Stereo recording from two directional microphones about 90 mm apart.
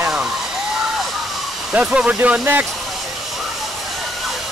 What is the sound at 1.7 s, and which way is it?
Speech, 10° right (ahead or behind).